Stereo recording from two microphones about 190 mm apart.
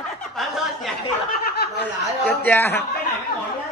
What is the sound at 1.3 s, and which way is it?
Snicker, 55° left (ahead or behind).